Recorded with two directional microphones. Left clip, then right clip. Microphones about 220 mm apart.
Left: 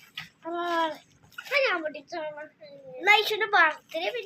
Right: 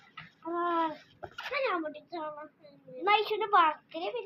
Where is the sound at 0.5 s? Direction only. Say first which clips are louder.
Left 2 dB; 15° left (ahead or behind).